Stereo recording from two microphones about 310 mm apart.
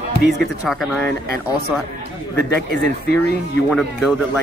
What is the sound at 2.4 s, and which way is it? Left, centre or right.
Speech, right.